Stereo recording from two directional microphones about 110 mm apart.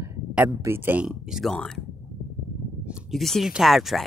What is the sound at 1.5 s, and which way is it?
Speech, 5° left (ahead or behind).